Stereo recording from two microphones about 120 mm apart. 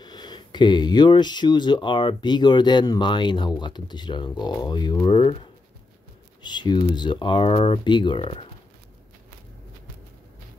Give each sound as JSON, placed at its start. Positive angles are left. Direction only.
{"t": 0.0, "sound": "speech", "side_deg": 35}